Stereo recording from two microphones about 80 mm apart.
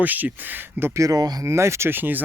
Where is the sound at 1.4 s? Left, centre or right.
Right.